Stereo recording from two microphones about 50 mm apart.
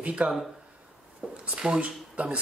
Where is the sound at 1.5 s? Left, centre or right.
Right.